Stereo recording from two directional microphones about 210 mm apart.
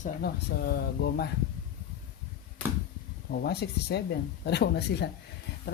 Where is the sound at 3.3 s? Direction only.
50° left (ahead or behind).